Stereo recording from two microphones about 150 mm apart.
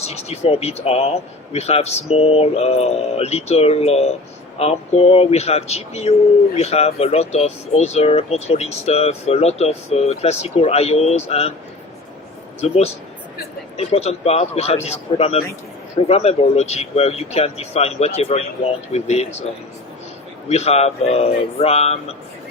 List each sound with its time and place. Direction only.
0.0 s speech: 45° left (ahead or behind)
12.5 s speech: 45° left (ahead or behind)
20.5 s speech: 45° left (ahead or behind)